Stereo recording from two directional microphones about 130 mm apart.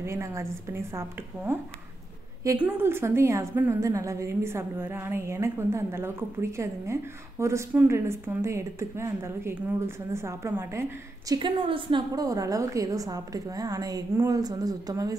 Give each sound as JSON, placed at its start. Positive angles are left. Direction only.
{"t": 0.0, "sound": "a woman's voice", "side_deg": -20}
{"t": 2.6, "sound": "a woman's voice", "side_deg": -20}
{"t": 11.3, "sound": "a woman's voice", "side_deg": -40}